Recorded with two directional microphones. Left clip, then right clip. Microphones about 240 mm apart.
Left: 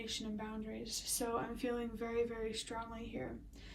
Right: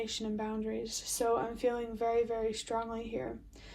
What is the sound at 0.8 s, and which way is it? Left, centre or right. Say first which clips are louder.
A woman's voice: right 3 dB; right.